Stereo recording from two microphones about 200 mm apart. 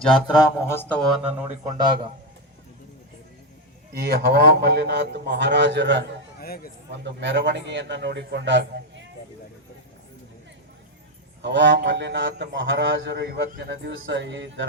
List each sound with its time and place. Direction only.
0.1 s speech: 20° left (ahead or behind)
1.6 s a man's voice: 20° right (ahead or behind)
3.9 s a man's voice: 50° right (ahead or behind)
6.4 s speech: 50° left (ahead or behind)
6.9 s a man's voice: 60° right (ahead or behind)
11.4 s a man's voice: 60° right (ahead or behind)